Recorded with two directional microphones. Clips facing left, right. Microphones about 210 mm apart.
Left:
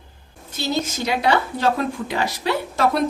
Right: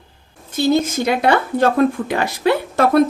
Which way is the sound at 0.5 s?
55° right (ahead or behind).